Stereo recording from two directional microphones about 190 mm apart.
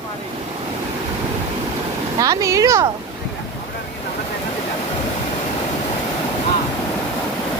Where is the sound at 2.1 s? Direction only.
15° right (ahead or behind).